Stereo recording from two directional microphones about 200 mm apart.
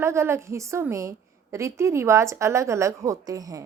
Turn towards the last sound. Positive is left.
turn(degrees=-15)  # may be behind; listen again after turning